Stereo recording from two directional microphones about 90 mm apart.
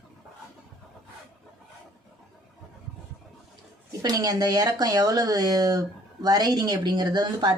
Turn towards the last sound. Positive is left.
turn(degrees=-50)  # may be behind; listen again after turning